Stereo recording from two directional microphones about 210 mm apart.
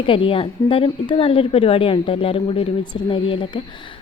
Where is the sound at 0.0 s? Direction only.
25° left (ahead or behind).